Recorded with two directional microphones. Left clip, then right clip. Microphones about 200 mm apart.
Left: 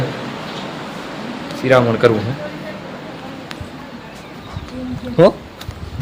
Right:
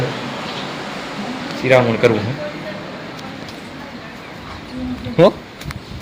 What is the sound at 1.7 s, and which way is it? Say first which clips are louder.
Speech: left 1 dB; 15° left (ahead or behind).